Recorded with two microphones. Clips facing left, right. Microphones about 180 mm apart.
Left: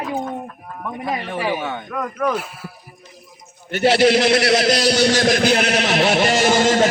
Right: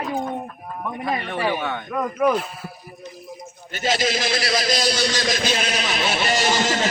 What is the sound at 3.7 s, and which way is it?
A man's voice, 65° left (ahead or behind).